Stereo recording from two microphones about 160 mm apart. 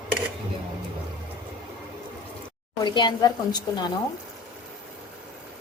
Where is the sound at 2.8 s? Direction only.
30° left (ahead or behind).